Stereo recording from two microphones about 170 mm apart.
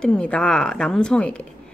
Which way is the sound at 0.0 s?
5° left (ahead or behind).